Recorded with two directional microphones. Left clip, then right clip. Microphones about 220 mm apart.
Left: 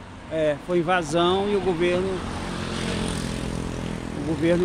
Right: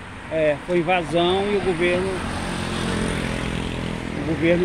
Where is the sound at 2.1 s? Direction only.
40° right (ahead or behind).